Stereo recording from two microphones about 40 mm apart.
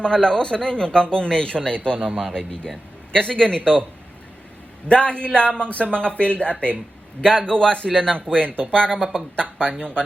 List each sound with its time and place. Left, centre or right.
0.0 s speech: centre
4.9 s speech: left